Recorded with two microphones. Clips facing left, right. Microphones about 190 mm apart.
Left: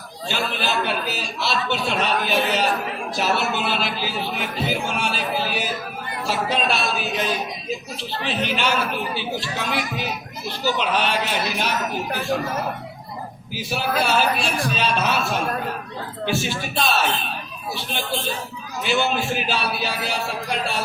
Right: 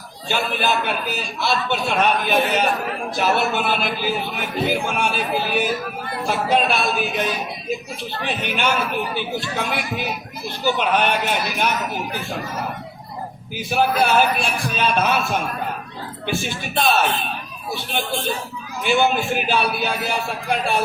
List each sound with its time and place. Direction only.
0.3 s speech: 50° right (ahead or behind)
13.6 s speech: 55° right (ahead or behind)